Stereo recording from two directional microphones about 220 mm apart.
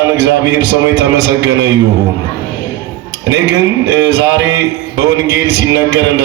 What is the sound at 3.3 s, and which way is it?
A man's voice, 50° right (ahead or behind).